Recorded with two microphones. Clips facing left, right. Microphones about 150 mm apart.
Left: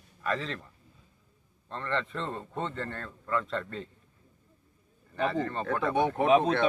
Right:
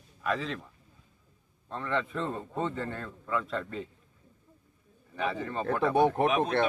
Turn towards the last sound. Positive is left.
turn(degrees=30)  # may be behind; listen again after turning